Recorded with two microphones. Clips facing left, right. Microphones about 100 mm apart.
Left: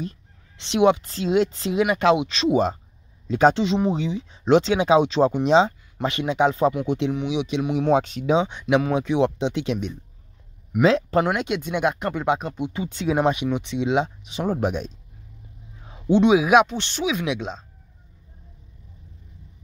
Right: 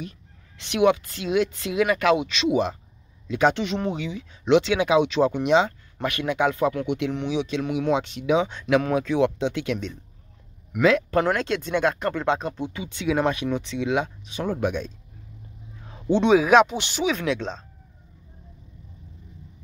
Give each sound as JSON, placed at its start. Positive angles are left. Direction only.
{"t": 0.6, "sound": "speech", "side_deg": 25}
{"t": 7.9, "sound": "speech", "side_deg": 40}
{"t": 8.3, "sound": "speech", "side_deg": 20}
{"t": 11.3, "sound": "speech", "side_deg": 15}
{"t": 12.8, "sound": "speech", "side_deg": 40}
{"t": 13.1, "sound": "speech", "side_deg": 20}
{"t": 15.8, "sound": "speech", "side_deg": 10}
{"t": 16.6, "sound": "speech", "side_deg": -10}
{"t": 17.2, "sound": "speech", "side_deg": 10}